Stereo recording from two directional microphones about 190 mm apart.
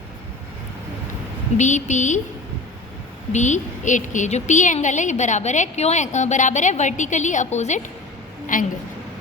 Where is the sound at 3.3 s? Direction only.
40° left (ahead or behind).